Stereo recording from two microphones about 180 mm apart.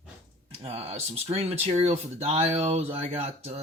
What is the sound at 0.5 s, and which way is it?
Speech, 35° right (ahead or behind).